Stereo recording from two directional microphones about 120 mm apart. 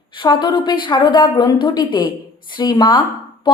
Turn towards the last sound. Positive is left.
turn(degrees=40)  # may be behind; listen again after turning